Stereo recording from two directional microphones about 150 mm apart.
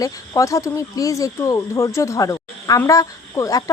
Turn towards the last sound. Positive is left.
turn(degrees=20)  # may be behind; listen again after turning